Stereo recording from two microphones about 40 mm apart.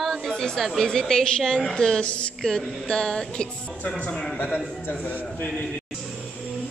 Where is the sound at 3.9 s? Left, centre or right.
Left.